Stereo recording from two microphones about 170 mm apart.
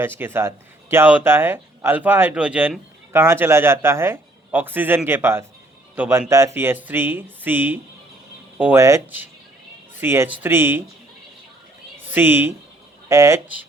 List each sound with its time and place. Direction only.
0.0 s speech: 15° right (ahead or behind)
12.1 s speech: 10° right (ahead or behind)